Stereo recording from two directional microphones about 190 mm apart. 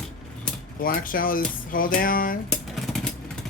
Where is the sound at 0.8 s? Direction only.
45° left (ahead or behind).